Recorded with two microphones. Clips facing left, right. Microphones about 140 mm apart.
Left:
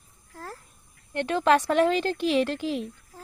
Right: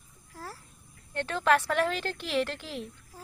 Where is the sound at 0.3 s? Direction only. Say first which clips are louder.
Left 3 dB; 10° right (ahead or behind).